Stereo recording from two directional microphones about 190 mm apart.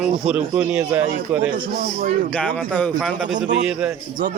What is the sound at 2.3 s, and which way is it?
Speech, 5° left (ahead or behind).